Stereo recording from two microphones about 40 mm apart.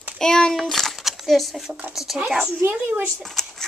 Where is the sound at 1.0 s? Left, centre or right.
Centre.